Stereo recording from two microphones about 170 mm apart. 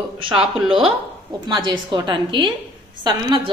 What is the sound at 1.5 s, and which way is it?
A woman's voice, 25° right (ahead or behind).